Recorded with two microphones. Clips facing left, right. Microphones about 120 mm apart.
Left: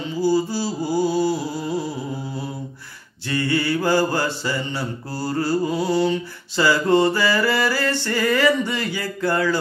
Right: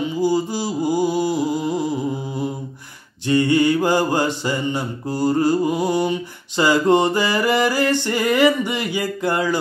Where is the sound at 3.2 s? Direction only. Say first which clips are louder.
Right 6 dB; 20° right (ahead or behind).